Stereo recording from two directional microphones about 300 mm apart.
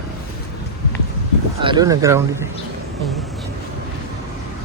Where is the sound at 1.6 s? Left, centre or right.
Centre.